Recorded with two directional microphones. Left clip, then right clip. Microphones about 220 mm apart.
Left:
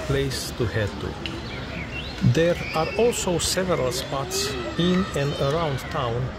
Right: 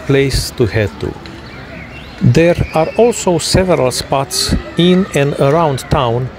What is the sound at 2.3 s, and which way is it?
Speech, 30° right (ahead or behind).